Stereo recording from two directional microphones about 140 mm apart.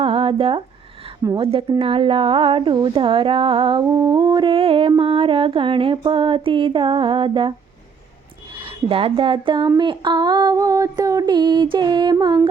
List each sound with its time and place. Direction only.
0.0 s a sound: 40° right (ahead or behind)
8.6 s speech: 40° right (ahead or behind)
9.6 s female singing: 30° right (ahead or behind)